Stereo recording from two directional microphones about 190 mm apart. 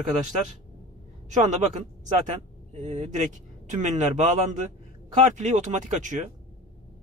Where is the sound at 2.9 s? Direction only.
40° right (ahead or behind).